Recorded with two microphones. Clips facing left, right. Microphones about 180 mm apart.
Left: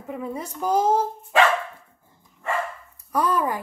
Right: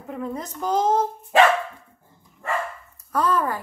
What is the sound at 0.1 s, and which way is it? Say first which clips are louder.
Speech: right 1 dB; 10° left (ahead or behind).